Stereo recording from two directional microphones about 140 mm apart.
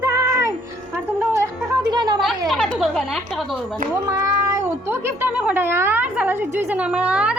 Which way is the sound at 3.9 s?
20° right (ahead or behind).